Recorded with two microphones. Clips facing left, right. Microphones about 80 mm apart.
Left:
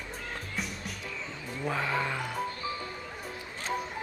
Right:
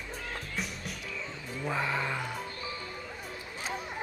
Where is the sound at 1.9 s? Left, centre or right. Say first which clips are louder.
Left 2 dB; centre.